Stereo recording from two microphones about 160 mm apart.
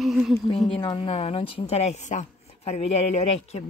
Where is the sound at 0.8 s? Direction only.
35° left (ahead or behind).